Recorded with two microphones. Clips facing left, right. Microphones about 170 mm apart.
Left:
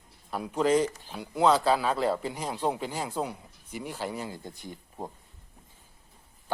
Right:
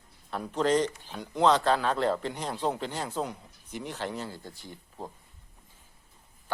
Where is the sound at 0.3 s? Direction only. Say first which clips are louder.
Left 1 dB; 10° left (ahead or behind).